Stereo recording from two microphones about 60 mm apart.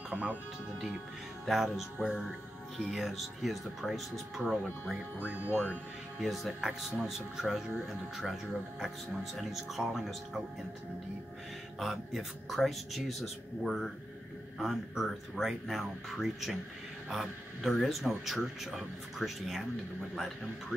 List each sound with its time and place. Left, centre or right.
0.1 s speech: right
1.4 s speech: centre
5.2 s speech: right
6.1 s speech: centre
11.8 s speech: centre